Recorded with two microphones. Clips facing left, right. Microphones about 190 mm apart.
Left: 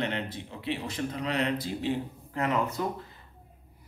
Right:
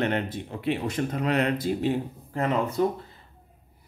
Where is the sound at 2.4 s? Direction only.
30° right (ahead or behind).